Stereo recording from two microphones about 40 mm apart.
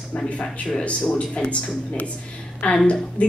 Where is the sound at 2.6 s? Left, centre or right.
Left.